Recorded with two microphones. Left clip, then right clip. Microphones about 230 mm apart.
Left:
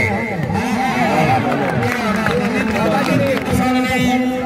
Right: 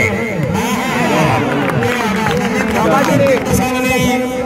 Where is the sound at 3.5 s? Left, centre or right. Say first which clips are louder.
Right 2 dB; centre.